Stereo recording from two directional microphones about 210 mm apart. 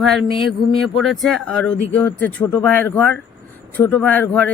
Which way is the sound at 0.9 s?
Centre (ahead or behind).